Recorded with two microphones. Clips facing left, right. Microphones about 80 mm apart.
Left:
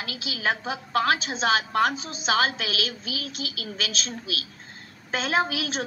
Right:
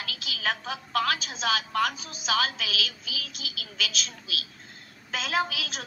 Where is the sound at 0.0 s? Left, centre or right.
Left.